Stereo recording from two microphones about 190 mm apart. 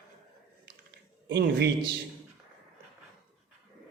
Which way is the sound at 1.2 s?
65° right (ahead or behind).